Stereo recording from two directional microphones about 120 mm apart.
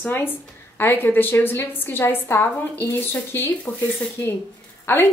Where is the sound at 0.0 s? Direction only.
15° left (ahead or behind).